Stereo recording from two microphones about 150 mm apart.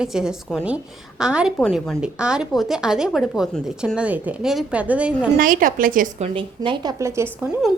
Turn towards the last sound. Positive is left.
turn(degrees=-15)  # may be behind; listen again after turning